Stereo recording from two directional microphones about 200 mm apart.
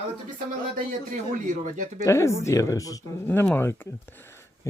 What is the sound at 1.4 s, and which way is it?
Speech, 40° right (ahead or behind).